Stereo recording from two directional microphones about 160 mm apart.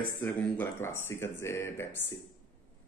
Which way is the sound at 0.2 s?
15° left (ahead or behind).